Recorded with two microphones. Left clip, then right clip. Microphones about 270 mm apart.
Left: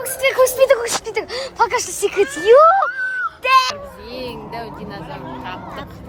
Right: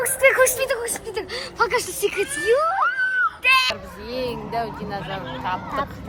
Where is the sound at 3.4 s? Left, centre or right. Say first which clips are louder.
Left 5 dB; left.